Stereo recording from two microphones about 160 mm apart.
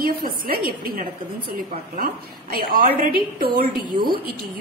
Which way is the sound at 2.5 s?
65° right (ahead or behind).